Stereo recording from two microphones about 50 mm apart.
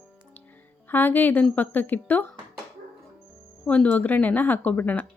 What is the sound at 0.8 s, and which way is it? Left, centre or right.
Speech, left.